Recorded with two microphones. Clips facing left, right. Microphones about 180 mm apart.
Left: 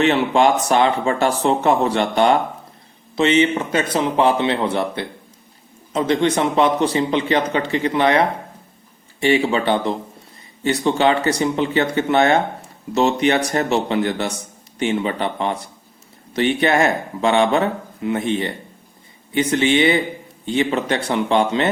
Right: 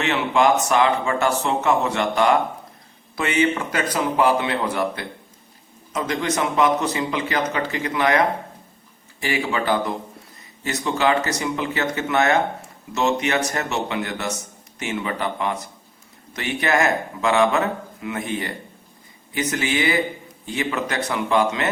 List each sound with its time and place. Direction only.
0.0 s a man's voice: 30° left (ahead or behind)